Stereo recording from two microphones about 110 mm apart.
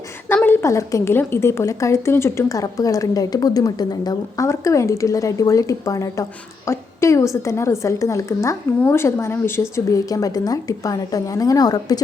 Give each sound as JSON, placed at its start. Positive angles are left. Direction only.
{"t": 0.4, "sound": "a woman's voice", "side_deg": 25}